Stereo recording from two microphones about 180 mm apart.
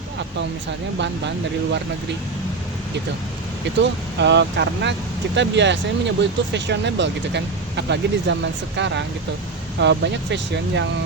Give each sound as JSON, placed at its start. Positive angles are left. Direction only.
{"t": 0.9, "sound": "speech", "side_deg": -80}
{"t": 3.8, "sound": "speech", "side_deg": -75}